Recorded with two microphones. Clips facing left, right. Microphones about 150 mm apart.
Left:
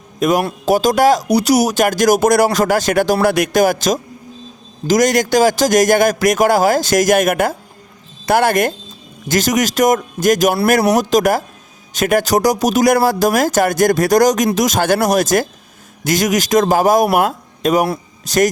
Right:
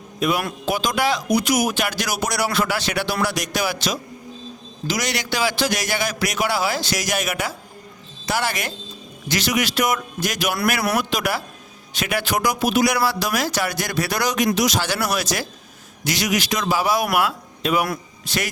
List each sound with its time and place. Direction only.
0.2 s a man's voice: 40° left (ahead or behind)